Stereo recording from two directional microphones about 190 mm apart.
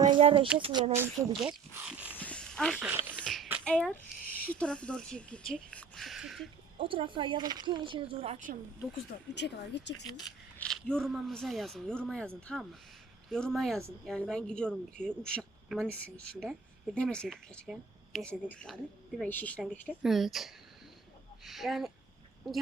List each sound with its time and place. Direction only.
0.0 s speech: 25° right (ahead or behind)
1.4 s speech: 5° right (ahead or behind)
2.1 s dog: 5° left (ahead or behind)
2.8 s speech: 10° right (ahead or behind)
3.2 s a sound: centre (ahead or behind)
4.5 s speech: 5° left (ahead or behind)
6.7 s speech: 30° right (ahead or behind)
9.3 s speech: 65° left (ahead or behind)
10.6 s speech: 5° left (ahead or behind)